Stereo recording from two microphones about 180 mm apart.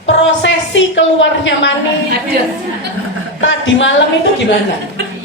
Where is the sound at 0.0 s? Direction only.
90° left.